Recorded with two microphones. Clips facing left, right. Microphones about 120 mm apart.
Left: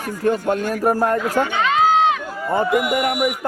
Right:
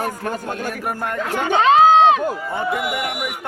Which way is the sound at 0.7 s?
40° left (ahead or behind).